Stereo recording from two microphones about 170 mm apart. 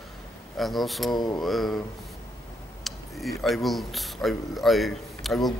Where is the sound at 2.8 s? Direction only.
Centre (ahead or behind).